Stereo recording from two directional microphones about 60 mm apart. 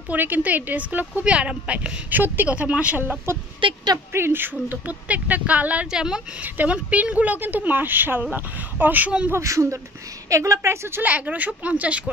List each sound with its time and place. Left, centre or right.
0.1 s a woman's voice: right
2.0 s a woman's voice: right
2.5 s a woman's voice: right
3.3 s a woman's voice: right
5.9 s a woman's voice: centre
6.4 s a woman's voice: right
9.4 s a woman's voice: right
11.0 s a woman's voice: right